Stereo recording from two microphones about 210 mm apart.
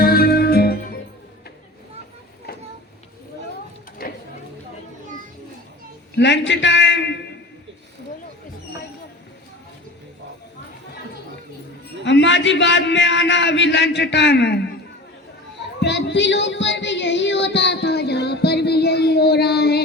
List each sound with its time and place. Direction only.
0.0 s music: 45° left (ahead or behind)
4.0 s a sound: 45° left (ahead or behind)
6.1 s a man's voice: 55° left (ahead or behind)
12.0 s a man's voice: 60° left (ahead or behind)
15.8 s child singing: 55° left (ahead or behind)